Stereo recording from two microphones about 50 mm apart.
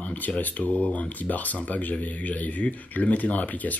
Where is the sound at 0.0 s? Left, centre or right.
Left.